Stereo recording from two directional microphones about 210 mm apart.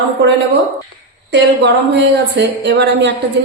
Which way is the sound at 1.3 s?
55° right (ahead or behind).